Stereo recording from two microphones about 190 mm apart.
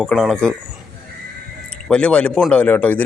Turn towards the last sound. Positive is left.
turn(degrees=10)  # may be behind; listen again after turning